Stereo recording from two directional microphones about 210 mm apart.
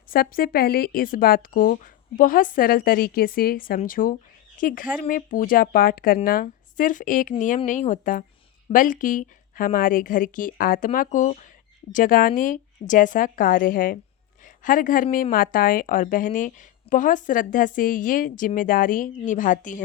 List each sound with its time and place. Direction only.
0.1 s a woman's voice: 45° left (ahead or behind)